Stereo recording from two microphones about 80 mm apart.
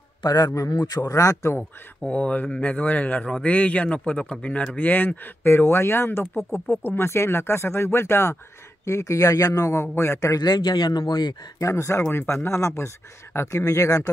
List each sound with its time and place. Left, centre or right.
0.2 s a man's voice: left
2.0 s speech: centre; by 10.4 s left
10.4 s speech: left
11.6 s speech: left